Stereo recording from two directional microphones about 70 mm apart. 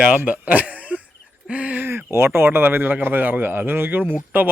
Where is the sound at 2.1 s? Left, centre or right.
Right.